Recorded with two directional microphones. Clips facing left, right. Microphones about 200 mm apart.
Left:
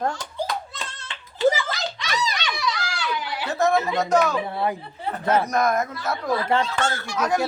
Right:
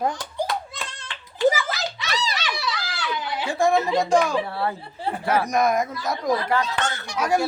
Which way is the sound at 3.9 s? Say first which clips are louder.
Right 1 dB; 10° right (ahead or behind).